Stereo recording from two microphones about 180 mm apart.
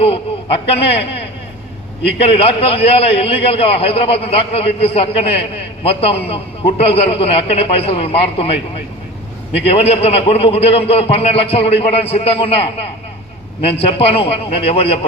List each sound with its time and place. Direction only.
0.0 s a man's voice: 30° left (ahead or behind)
9.6 s a man's voice: 35° left (ahead or behind)